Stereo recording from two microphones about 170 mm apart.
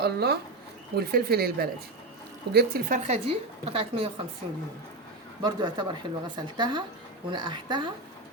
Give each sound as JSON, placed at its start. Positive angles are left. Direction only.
{"t": 0.0, "sound": "speech", "side_deg": -70}
{"t": 2.9, "sound": "a woman's voice", "side_deg": -40}
{"t": 5.4, "sound": "a woman's voice", "side_deg": -25}